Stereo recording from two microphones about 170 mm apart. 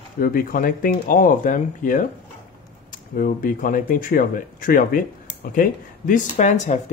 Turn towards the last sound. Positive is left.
turn(degrees=45)  # may be behind; listen again after turning